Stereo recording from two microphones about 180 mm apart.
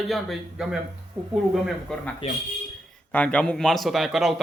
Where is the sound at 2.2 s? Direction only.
35° left (ahead or behind).